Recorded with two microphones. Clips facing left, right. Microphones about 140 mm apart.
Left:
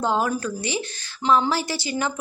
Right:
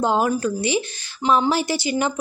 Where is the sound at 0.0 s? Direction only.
15° right (ahead or behind).